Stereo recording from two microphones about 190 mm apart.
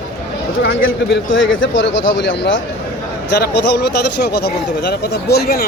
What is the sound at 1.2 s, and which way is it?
Speech, 90° left.